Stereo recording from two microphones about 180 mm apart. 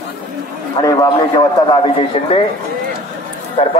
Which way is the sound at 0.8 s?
20° left (ahead or behind).